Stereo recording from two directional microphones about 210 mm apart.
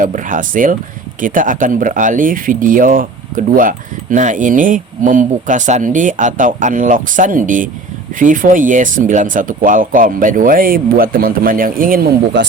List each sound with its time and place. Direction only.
0.0 s speech: 40° right (ahead or behind)